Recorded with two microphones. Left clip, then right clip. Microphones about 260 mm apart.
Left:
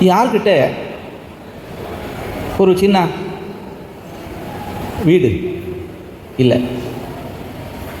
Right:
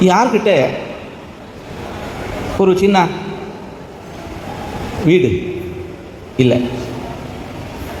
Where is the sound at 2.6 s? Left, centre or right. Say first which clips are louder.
Even; left.